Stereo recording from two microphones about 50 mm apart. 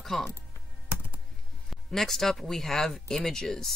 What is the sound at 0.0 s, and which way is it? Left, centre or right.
Chopping, centre.